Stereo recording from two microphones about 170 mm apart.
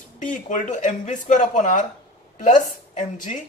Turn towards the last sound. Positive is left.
turn(degrees=50)  # may be behind; listen again after turning